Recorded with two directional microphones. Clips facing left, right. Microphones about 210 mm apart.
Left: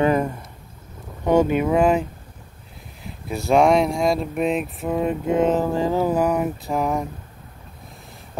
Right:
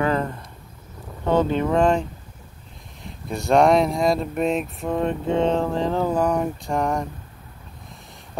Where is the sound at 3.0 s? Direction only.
5° left (ahead or behind).